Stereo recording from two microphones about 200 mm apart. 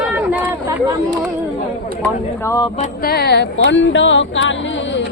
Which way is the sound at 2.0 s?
15° left (ahead or behind).